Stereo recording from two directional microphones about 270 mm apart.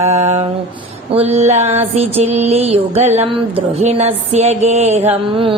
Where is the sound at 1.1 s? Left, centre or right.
Right.